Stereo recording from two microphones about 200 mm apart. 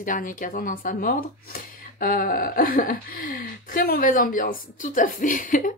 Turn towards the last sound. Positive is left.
turn(degrees=40)  # may be behind; listen again after turning